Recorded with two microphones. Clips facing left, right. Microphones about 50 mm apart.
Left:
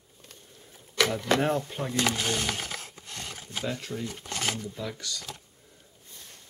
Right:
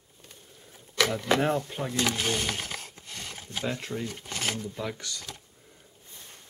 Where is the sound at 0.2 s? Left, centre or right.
Centre.